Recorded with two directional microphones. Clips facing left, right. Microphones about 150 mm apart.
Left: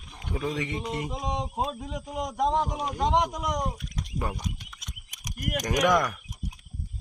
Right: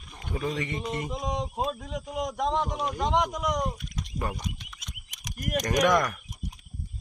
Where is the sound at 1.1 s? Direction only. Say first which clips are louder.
Even; 30° left (ahead or behind).